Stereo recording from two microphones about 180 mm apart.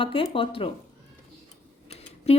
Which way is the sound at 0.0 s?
30° left (ahead or behind).